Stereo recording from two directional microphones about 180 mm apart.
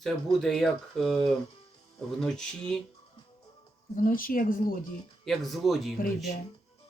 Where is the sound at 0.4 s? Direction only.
5° left (ahead or behind).